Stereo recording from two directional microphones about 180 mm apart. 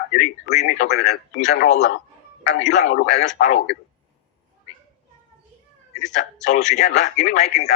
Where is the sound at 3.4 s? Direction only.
55° left (ahead or behind).